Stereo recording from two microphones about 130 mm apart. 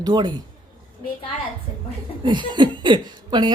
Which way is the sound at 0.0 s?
35° right (ahead or behind).